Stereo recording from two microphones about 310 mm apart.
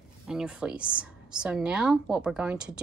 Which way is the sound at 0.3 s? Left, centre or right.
Centre.